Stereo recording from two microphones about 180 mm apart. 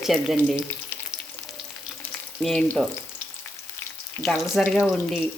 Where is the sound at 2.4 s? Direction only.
5° left (ahead or behind).